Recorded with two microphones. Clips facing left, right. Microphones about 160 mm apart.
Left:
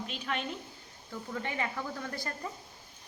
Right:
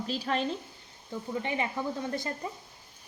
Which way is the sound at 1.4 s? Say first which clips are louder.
Right 3 dB; 20° right (ahead or behind).